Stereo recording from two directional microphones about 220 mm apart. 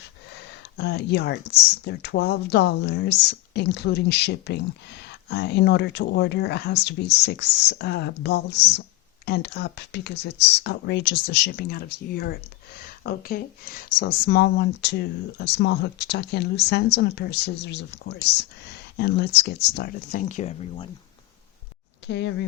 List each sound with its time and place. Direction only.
0.3 s speech: 50° left (ahead or behind); by 20.7 s 35° left (ahead or behind)
22.0 s speech: 55° left (ahead or behind)